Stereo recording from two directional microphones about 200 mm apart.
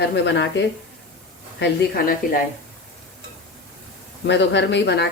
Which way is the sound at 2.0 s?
45° left (ahead or behind).